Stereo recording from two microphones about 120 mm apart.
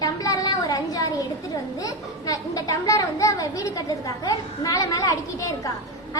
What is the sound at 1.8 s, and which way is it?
Speech, 30° left (ahead or behind).